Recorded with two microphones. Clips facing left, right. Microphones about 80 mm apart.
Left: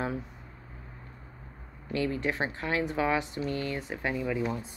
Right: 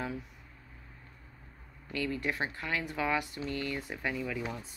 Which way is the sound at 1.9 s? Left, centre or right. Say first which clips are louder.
Left 4 dB; left.